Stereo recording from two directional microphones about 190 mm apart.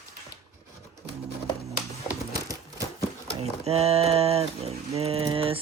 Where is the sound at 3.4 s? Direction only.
30° right (ahead or behind).